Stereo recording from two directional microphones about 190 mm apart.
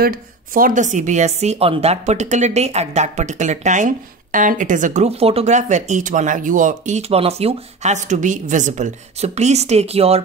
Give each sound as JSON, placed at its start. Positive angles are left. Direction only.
{"t": 0.0, "sound": "a woman's voice", "side_deg": -50}